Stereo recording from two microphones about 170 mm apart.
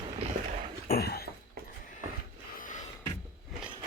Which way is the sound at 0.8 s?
65° left (ahead or behind).